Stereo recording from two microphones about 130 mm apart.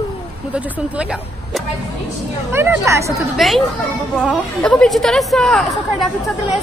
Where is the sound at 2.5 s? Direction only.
20° right (ahead or behind).